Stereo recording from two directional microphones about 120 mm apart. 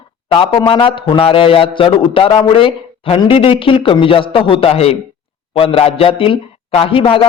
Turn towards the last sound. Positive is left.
turn(degrees=50)  # may be behind; listen again after turning